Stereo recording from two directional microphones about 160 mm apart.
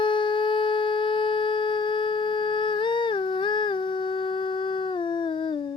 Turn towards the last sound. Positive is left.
turn(degrees=30)  # may be behind; listen again after turning